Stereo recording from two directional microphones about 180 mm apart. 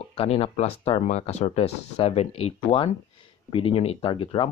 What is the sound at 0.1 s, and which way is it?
Speech, 35° left (ahead or behind).